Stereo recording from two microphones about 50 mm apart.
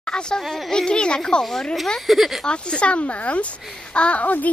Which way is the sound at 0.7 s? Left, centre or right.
Centre.